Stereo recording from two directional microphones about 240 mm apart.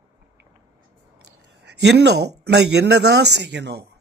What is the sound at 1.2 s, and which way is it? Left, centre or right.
Speech, right.